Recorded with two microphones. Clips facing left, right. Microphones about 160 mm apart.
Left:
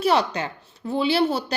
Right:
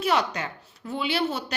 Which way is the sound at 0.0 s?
30° left (ahead or behind).